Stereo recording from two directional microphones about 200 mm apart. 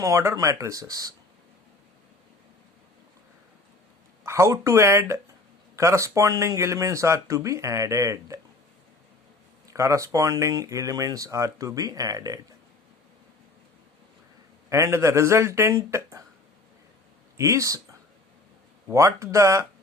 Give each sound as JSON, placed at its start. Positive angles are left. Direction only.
{"t": 0.0, "sound": "speech", "side_deg": -15}
{"t": 4.2, "sound": "speech", "side_deg": -15}
{"t": 9.6, "sound": "speech", "side_deg": -15}
{"t": 14.7, "sound": "speech", "side_deg": -15}
{"t": 17.3, "sound": "speech", "side_deg": -15}
{"t": 18.9, "sound": "speech", "side_deg": -15}